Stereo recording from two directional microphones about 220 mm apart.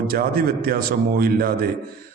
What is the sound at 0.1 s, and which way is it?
A man's voice, 40° right (ahead or behind).